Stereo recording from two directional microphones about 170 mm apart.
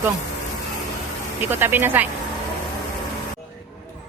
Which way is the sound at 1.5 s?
10° right (ahead or behind).